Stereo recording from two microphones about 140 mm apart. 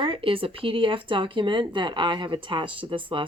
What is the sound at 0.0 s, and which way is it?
Speech, 40° right (ahead or behind).